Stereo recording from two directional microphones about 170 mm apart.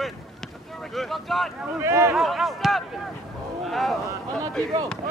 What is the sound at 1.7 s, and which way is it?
Speech, 15° right (ahead or behind).